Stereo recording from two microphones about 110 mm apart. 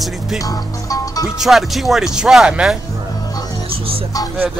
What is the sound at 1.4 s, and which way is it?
Speech, centre (ahead or behind).